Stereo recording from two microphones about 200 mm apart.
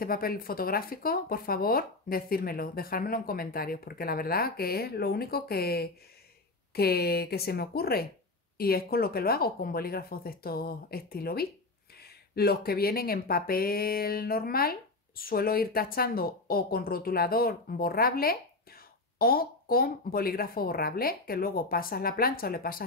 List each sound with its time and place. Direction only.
0.0 s speech: 45° left (ahead or behind)